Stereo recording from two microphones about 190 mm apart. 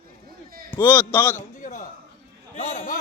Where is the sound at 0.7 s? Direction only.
10° left (ahead or behind).